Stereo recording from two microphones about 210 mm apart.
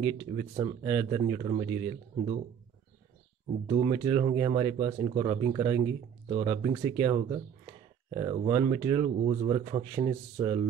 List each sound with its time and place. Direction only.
0.0 s speech: 20° right (ahead or behind)
3.4 s speech: 25° right (ahead or behind)